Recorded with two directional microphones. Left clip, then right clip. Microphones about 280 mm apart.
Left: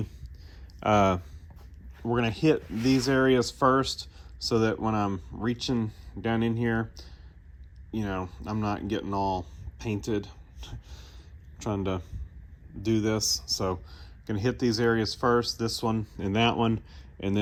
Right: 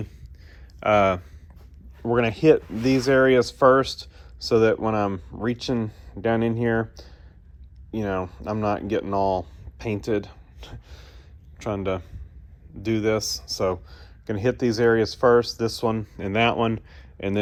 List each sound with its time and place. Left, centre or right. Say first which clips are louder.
0.8 s speech: right 4 dB; centre